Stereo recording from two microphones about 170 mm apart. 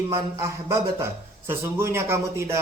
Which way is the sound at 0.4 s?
15° right (ahead or behind).